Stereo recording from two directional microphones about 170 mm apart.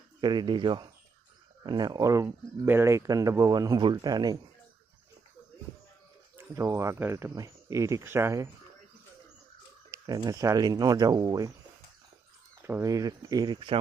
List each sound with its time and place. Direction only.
0.2 s speech: 25° right (ahead or behind)
6.3 s speech: 15° right (ahead or behind)
9.9 s speech: 20° right (ahead or behind)
12.6 s speech: 15° right (ahead or behind)